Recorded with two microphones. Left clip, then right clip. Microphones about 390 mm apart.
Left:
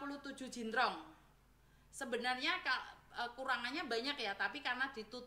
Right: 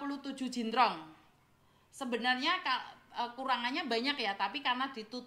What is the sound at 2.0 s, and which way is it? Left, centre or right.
A woman's voice, centre.